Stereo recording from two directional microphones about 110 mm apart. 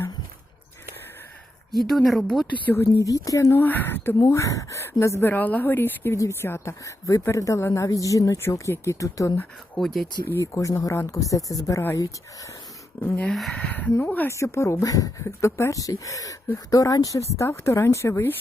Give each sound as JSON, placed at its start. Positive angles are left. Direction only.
{"t": 1.7, "sound": "speech", "side_deg": 0}
{"t": 3.0, "sound": "speech", "side_deg": 30}
{"t": 3.6, "sound": "speech", "side_deg": 15}
{"t": 9.7, "sound": "speech", "side_deg": 5}
{"t": 10.2, "sound": "speech", "side_deg": 25}
{"t": 13.3, "sound": "speech", "side_deg": 0}
{"t": 13.6, "sound": "speech", "side_deg": 15}
{"t": 14.3, "sound": "speech", "side_deg": 25}